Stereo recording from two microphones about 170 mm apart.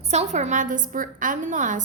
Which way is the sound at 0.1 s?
40° right (ahead or behind).